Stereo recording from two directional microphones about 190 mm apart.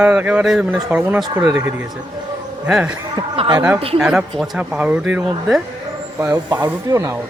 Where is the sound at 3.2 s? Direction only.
25° right (ahead or behind).